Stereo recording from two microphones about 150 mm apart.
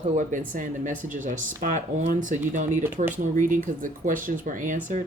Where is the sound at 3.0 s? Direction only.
45° right (ahead or behind).